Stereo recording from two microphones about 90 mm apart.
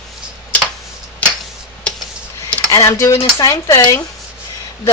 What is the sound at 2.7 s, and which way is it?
Speech, 35° left (ahead or behind).